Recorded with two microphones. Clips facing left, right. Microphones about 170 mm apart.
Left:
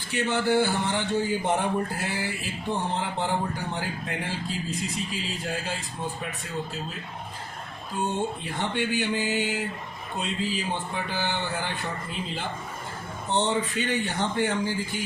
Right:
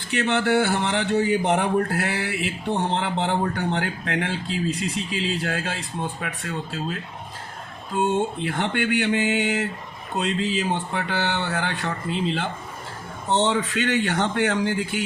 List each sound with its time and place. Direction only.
0.1 s a man's voice: 80° right
8.4 s a man's voice: 90° right
10.2 s speech: 75° right (ahead or behind)
13.4 s a man's voice: 90° right